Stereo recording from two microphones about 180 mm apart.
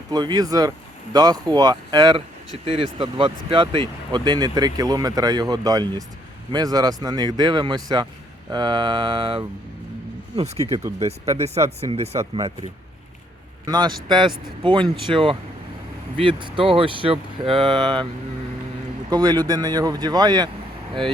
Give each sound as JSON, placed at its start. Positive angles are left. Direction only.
{"t": 0.1, "sound": "speech", "side_deg": -20}
{"t": 11.3, "sound": "speech", "side_deg": -35}
{"t": 13.7, "sound": "speech", "side_deg": -25}
{"t": 19.1, "sound": "speech", "side_deg": -25}